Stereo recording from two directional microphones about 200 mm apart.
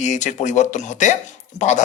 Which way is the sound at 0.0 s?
35° left (ahead or behind).